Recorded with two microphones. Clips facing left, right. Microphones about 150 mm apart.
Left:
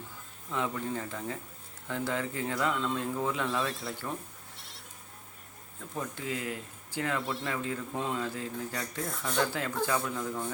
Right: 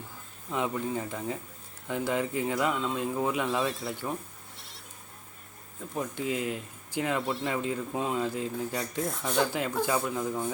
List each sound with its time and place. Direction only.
0.5 s speech: 15° right (ahead or behind)
3.6 s speech: centre (ahead or behind)
4.5 s goat: centre (ahead or behind)
5.9 s speech: 15° right (ahead or behind)